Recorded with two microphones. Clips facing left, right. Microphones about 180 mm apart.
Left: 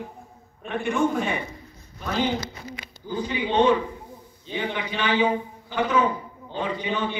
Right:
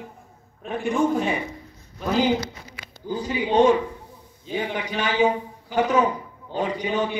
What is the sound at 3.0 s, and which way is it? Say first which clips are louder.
A man's voice: right 2 dB; 40° right (ahead or behind).